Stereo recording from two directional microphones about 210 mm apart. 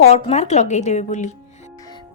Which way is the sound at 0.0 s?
30° left (ahead or behind).